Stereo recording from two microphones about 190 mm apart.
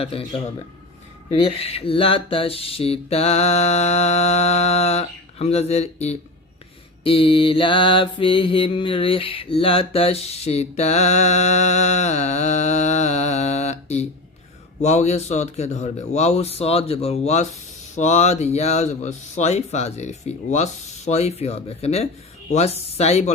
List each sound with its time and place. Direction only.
0.0 s mantra: 30° left (ahead or behind)
1.3 s mantra: 30° left (ahead or behind)